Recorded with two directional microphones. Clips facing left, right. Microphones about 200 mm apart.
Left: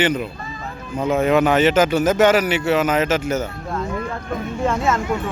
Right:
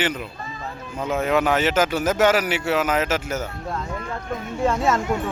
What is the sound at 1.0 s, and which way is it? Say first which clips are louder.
Speech: left 5 dB; 10° left (ahead or behind).